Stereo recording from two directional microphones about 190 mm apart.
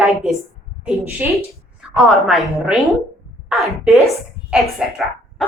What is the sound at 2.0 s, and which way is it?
A woman's voice, centre (ahead or behind).